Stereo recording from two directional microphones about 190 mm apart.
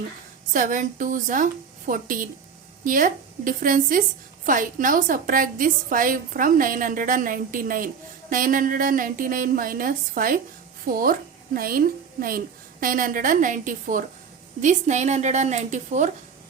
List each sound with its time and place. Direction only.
0.5 s a woman's voice: 45° right (ahead or behind)
12.8 s a woman's voice: 45° right (ahead or behind)